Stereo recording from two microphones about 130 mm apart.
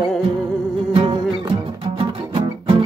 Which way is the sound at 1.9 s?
50° right (ahead or behind).